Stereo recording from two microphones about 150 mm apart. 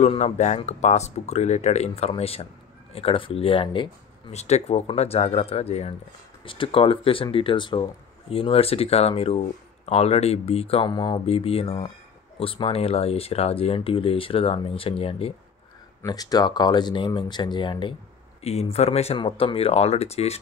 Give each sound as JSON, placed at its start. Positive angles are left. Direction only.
{"t": 0.0, "sound": "speech", "side_deg": 50}
{"t": 4.3, "sound": "speech", "side_deg": 45}
{"t": 16.0, "sound": "speech", "side_deg": 25}
{"t": 18.4, "sound": "speech", "side_deg": 45}